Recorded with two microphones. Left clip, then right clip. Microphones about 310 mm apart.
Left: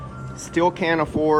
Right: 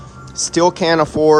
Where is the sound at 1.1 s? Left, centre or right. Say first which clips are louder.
Right 8 dB; centre.